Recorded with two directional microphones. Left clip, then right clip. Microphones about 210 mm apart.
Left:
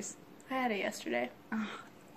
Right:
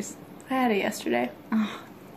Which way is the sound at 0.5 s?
15° right (ahead or behind).